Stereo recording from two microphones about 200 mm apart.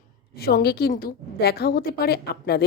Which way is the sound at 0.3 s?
50° left (ahead or behind).